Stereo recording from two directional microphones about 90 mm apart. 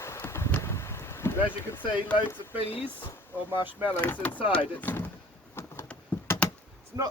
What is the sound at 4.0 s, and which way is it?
Speech, 15° left (ahead or behind).